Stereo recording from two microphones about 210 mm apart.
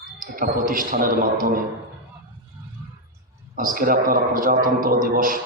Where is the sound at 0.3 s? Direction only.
40° right (ahead or behind).